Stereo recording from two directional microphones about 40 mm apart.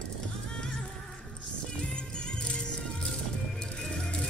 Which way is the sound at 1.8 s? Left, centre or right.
Left.